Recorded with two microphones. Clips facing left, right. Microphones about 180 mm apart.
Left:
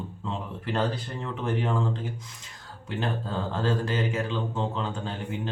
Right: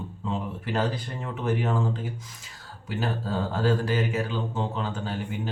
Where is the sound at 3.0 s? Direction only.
5° right (ahead or behind).